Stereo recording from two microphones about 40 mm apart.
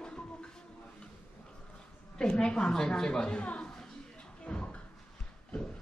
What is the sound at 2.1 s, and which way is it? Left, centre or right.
A woman's voice, left.